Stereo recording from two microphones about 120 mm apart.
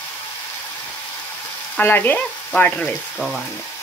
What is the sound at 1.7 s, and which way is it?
Speech, 15° left (ahead or behind).